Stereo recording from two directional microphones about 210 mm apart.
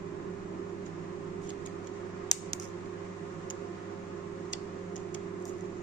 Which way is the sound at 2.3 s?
15° left (ahead or behind).